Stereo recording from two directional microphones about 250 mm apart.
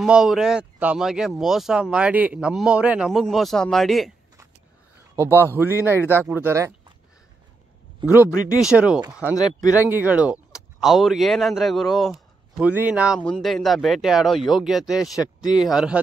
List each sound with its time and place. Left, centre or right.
0.0 s speech: centre
5.1 s speech: centre
8.0 s speech: centre
9.6 s speech: centre
9.8 s speech: centre
15.1 s speech: centre
15.7 s speech: centre